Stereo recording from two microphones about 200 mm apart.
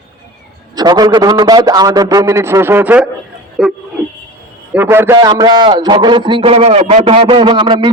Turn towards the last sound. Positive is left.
turn(degrees=-25)  # may be behind; listen again after turning